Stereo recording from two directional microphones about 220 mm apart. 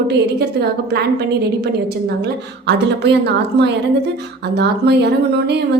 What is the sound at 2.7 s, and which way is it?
A woman's voice, 50° right (ahead or behind).